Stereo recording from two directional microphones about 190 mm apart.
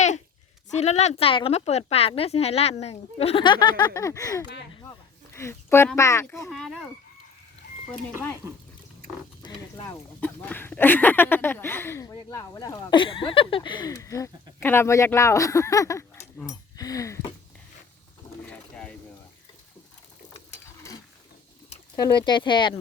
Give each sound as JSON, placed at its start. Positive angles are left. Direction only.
{"t": 0.7, "sound": "a woman's voice", "side_deg": 35}
{"t": 6.5, "sound": "speech", "side_deg": 0}
{"t": 9.4, "sound": "speech", "side_deg": 20}
{"t": 10.2, "sound": "speech", "side_deg": 10}
{"t": 18.4, "sound": "mechanisms", "side_deg": 5}
{"t": 21.9, "sound": "speech", "side_deg": 20}